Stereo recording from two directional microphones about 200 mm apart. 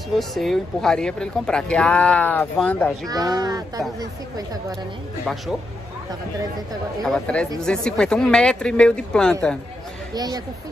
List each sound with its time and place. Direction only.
0.1 s speech: centre (ahead or behind)
3.1 s speech: 20° right (ahead or behind)
7.1 s speech: 5° left (ahead or behind)
10.1 s speech: 20° right (ahead or behind)